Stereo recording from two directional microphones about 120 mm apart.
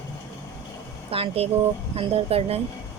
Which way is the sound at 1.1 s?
50° right (ahead or behind).